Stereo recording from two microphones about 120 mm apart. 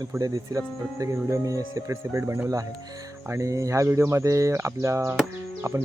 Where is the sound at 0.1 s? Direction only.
30° right (ahead or behind).